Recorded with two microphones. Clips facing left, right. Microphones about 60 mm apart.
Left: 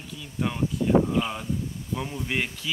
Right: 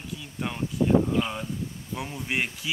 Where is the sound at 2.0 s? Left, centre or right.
Centre.